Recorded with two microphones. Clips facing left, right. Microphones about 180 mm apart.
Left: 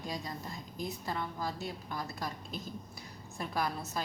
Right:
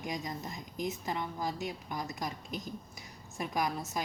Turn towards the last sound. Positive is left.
turn(degrees=-15)  # may be behind; listen again after turning